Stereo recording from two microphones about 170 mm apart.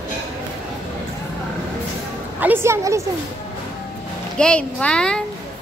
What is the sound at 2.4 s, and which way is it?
Speech, 15° right (ahead or behind).